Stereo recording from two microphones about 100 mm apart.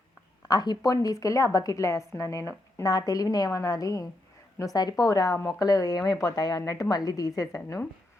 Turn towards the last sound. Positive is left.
turn(degrees=35)  # may be behind; listen again after turning